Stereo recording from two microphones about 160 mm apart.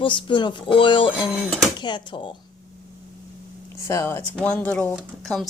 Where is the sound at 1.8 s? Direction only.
30° left (ahead or behind).